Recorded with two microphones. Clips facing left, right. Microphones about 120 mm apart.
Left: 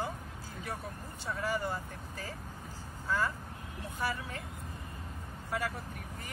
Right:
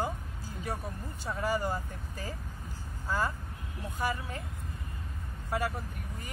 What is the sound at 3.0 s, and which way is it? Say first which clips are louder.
Speech: right 1 dB; 40° right (ahead or behind).